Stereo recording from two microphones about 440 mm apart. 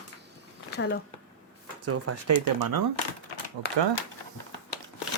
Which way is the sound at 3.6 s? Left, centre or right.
Right.